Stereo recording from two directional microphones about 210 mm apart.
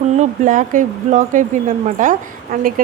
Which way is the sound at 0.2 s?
40° right (ahead or behind).